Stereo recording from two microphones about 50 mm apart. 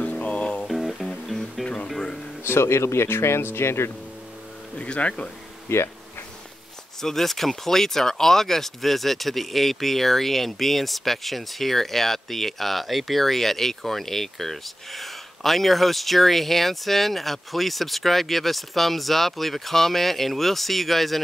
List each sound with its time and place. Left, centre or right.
0.0 s music: left
0.7 s music: centre
2.4 s speech: left
4.7 s speech: left
5.7 s speech: left
7.0 s speech: centre